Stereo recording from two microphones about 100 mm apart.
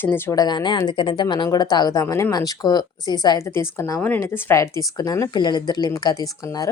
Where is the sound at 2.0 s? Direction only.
30° left (ahead or behind).